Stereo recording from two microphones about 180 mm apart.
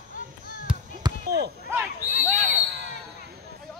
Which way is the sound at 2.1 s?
55° left (ahead or behind).